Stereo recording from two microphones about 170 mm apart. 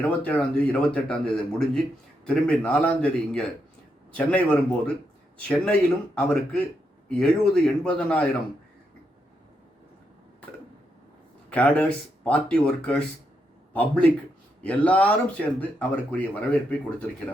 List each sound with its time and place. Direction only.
0.0 s speech: 10° left (ahead or behind)
6.1 s speech: 5° left (ahead or behind)
11.4 s speech: 10° left (ahead or behind)